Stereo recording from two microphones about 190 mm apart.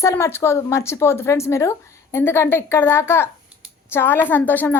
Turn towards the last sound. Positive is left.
turn(degrees=10)  # may be behind; listen again after turning